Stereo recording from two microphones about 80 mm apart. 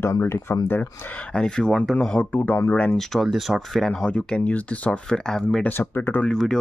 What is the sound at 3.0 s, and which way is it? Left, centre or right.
Speech, centre.